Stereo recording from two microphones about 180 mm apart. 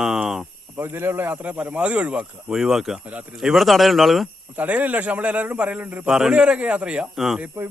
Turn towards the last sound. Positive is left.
turn(degrees=-10)  # may be behind; listen again after turning